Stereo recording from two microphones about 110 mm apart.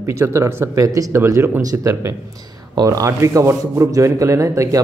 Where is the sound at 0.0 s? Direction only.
25° right (ahead or behind).